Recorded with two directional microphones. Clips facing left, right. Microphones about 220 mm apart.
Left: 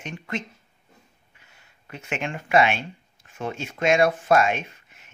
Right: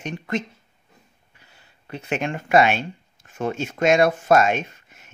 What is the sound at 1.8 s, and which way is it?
Speech, 35° right (ahead or behind).